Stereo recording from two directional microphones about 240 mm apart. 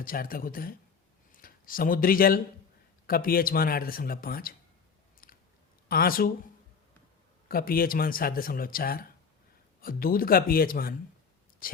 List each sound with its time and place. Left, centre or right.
0.0 s speech: left
5.2 s chewing: left
5.9 s speech: left
7.4 s speech: left